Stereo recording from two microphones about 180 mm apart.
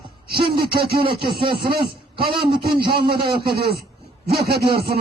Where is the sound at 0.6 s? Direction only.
60° right (ahead or behind).